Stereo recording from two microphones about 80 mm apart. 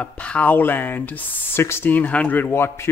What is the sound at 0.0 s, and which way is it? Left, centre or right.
Speech, centre.